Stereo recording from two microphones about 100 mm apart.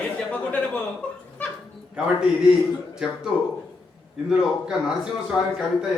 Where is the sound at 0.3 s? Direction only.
15° left (ahead or behind).